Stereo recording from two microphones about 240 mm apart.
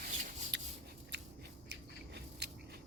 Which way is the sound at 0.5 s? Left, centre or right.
Right.